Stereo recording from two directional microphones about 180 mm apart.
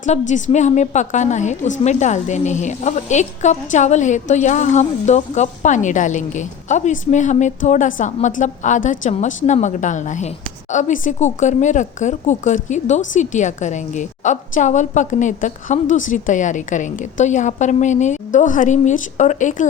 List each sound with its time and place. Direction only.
0.0 s a woman's voice: 40° left (ahead or behind)